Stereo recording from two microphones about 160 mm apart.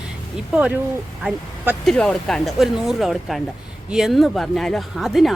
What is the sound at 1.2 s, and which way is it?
A woman's voice, centre (ahead or behind).